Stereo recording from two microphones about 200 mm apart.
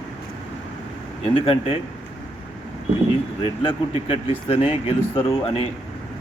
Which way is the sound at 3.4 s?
25° left (ahead or behind).